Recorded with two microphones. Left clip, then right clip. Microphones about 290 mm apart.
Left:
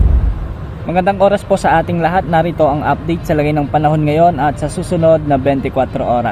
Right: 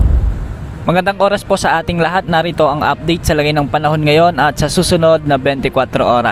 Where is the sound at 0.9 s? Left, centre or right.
Right.